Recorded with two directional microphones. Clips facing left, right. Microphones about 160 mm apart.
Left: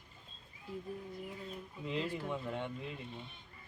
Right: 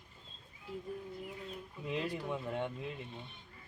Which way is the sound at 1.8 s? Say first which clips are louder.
Even; 15° right (ahead or behind).